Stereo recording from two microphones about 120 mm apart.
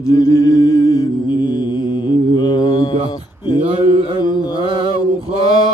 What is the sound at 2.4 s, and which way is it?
Mantra, 35° left (ahead or behind).